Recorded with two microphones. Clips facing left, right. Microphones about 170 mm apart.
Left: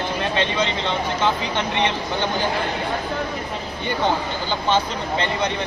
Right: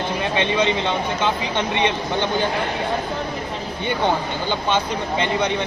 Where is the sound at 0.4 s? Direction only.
15° right (ahead or behind).